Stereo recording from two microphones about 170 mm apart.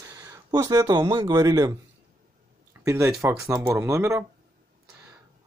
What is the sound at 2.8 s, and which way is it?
Speech, 15° right (ahead or behind).